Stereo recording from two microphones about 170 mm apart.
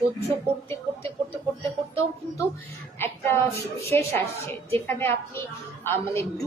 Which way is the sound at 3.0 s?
15° left (ahead or behind).